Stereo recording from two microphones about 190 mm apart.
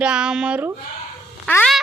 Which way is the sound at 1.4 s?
10° left (ahead or behind).